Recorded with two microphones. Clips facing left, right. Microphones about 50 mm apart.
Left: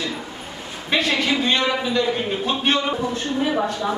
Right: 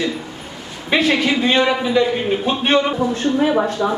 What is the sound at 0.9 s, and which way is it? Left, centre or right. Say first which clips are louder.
A woman's voice: right 4 dB; centre.